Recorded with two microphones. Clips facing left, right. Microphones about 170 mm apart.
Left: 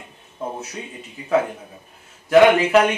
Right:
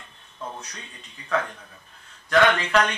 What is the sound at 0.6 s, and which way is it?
Speech, 10° left (ahead or behind).